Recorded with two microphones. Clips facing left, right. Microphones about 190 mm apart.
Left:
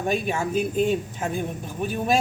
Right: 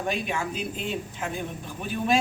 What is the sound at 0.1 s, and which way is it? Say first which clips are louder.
Speech: left 7 dB; 45° left (ahead or behind).